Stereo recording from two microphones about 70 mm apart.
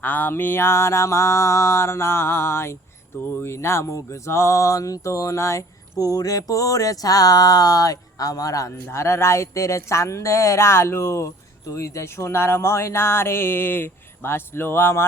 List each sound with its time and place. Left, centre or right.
0.0 s speech: left
3.4 s a sound: left
11.7 s speech: left